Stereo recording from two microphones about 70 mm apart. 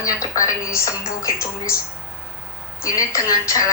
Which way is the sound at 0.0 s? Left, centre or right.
Left.